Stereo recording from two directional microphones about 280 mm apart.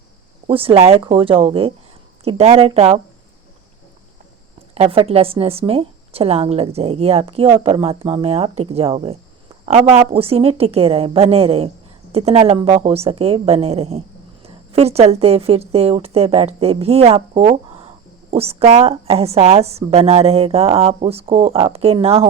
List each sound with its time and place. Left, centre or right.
0.4 s a woman's voice: centre
4.7 s a woman's voice: centre